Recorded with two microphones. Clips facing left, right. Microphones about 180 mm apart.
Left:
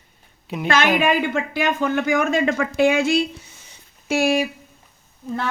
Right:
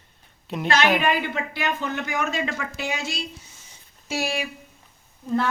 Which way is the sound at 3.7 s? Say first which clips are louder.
Left 8 dB; 60° left (ahead or behind).